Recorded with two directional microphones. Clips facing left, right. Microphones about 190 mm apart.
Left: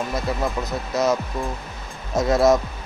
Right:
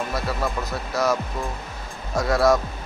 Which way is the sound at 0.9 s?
20° left (ahead or behind).